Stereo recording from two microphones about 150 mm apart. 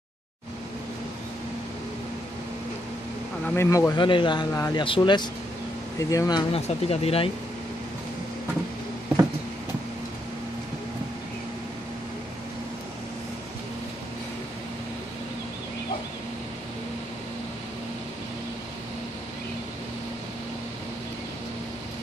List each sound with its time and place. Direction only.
3.4 s speech: 15° left (ahead or behind)
3.9 s speech: 30° left (ahead or behind)
6.5 s speech: 40° left (ahead or behind)